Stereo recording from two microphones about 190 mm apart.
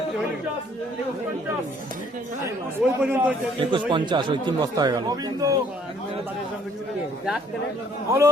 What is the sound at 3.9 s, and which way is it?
Speech, 25° right (ahead or behind).